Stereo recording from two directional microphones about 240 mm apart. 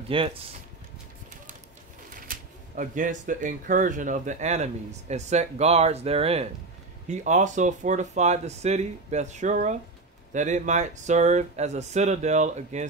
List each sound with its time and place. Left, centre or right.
0.1 s speech: right
2.0 s speech: right